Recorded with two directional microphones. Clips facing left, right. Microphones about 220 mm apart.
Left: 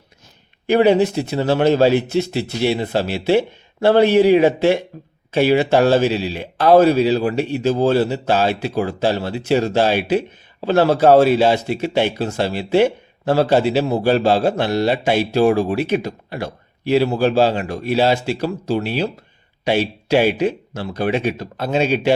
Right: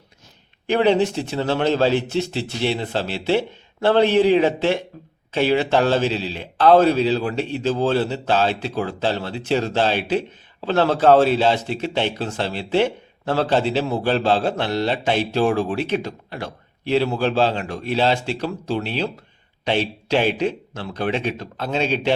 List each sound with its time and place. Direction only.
0.7 s speech: 10° left (ahead or behind)